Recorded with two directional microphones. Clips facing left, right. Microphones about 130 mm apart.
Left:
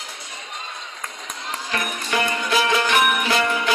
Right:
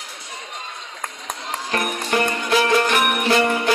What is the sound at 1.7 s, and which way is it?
Music, 45° right (ahead or behind).